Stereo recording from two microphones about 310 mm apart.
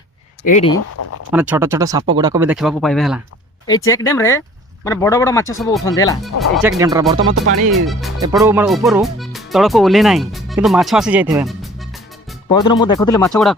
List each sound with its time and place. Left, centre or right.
0.4 s speech: left
1.3 s speech: centre
6.2 s speech: centre
7.3 s speech: right
7.7 s speech: centre
12.6 s speech: centre